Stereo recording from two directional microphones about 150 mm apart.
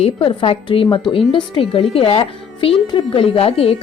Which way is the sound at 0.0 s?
35° left (ahead or behind).